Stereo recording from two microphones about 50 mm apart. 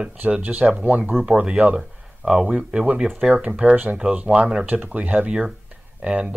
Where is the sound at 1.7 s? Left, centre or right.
Centre.